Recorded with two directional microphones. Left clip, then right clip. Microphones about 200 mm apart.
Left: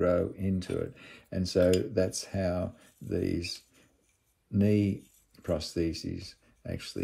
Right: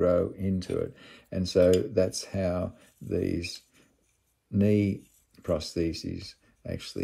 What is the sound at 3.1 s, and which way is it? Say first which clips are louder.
Speech: right 2 dB; 25° right (ahead or behind).